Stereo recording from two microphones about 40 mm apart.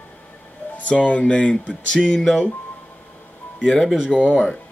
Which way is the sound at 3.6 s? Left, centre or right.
Centre.